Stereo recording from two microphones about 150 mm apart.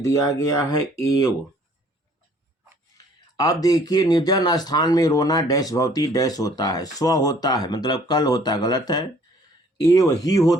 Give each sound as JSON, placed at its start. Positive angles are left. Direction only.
{"t": 0.0, "sound": "speech", "side_deg": 20}
{"t": 3.3, "sound": "speech", "side_deg": 25}